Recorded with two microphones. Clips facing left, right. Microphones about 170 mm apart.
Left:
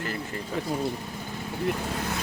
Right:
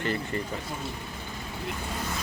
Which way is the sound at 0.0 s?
Centre (ahead or behind).